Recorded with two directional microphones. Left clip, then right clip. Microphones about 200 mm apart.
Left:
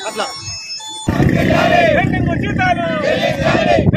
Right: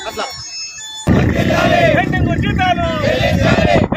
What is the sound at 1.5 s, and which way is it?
Speech, 5° right (ahead or behind).